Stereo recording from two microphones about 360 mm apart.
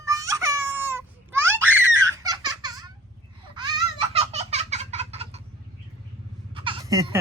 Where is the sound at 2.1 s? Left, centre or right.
Centre.